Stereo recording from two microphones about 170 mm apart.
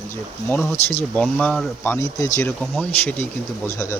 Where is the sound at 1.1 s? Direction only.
5° left (ahead or behind).